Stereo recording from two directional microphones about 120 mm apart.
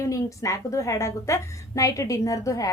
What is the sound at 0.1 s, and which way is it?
Speech, 25° left (ahead or behind).